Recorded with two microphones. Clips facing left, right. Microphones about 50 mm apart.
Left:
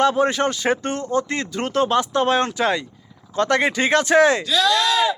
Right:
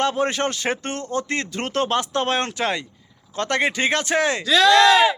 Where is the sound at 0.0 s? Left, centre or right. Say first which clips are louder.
Left 3 dB; right.